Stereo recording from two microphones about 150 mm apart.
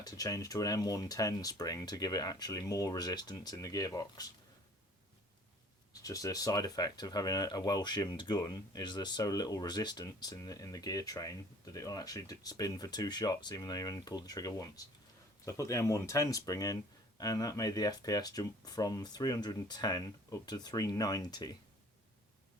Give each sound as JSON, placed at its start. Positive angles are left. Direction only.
{"t": 0.0, "sound": "speech", "side_deg": 25}
{"t": 5.9, "sound": "speech", "side_deg": 25}